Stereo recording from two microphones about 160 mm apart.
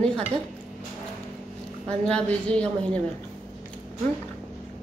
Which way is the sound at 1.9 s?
5° left (ahead or behind).